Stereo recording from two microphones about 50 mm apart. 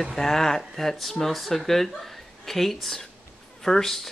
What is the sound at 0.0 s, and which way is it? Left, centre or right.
Speech, centre.